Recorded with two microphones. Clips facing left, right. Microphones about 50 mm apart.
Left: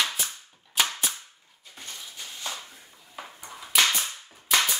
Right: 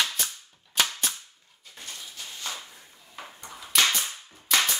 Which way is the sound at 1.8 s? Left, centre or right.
Left.